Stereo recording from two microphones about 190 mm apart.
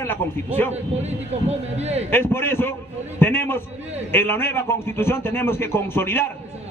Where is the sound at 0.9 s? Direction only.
35° right (ahead or behind).